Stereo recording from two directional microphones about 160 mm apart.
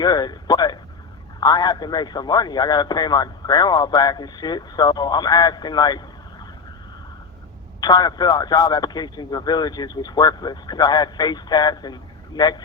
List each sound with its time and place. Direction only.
0.0 s a man's voice: 25° left (ahead or behind)
7.8 s speech: 25° left (ahead or behind)